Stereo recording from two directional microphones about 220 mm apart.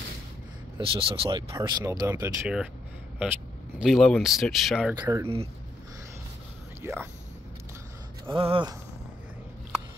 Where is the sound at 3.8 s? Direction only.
Centre (ahead or behind).